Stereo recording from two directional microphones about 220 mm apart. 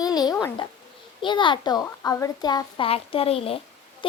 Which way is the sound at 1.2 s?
20° left (ahead or behind).